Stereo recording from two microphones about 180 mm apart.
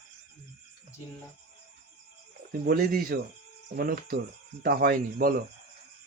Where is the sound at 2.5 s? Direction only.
55° right (ahead or behind).